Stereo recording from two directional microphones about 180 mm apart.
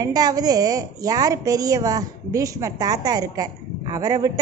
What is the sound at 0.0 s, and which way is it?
Speech, 20° right (ahead or behind).